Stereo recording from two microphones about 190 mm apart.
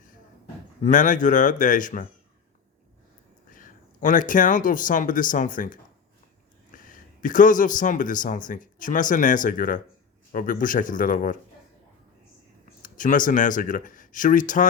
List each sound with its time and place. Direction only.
0.8 s speech: 40° left (ahead or behind)
3.5 s speech: 45° left (ahead or behind)
6.7 s a sound: 45° left (ahead or behind)
7.2 s speech: 45° left (ahead or behind)
12.8 s speech: 45° left (ahead or behind)